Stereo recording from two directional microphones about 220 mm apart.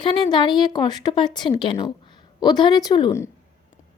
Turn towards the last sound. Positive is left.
turn(degrees=15)  # may be behind; listen again after turning